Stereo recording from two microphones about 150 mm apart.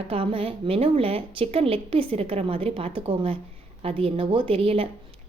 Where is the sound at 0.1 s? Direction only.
35° right (ahead or behind).